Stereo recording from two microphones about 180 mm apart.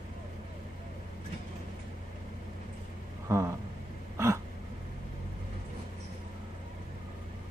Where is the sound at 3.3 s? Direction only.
15° right (ahead or behind).